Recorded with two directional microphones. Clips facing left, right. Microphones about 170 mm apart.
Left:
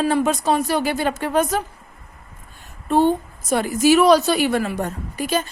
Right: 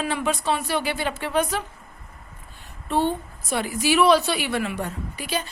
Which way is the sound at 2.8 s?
45° left (ahead or behind).